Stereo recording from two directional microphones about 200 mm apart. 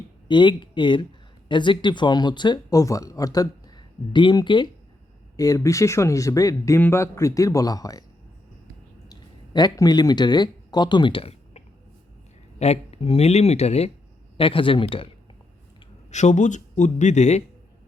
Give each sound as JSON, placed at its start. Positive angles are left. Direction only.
{"t": 0.3, "sound": "speech", "side_deg": 25}
{"t": 9.0, "sound": "speech", "side_deg": 20}